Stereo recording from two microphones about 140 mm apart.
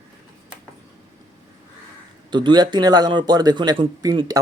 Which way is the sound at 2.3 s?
30° right (ahead or behind).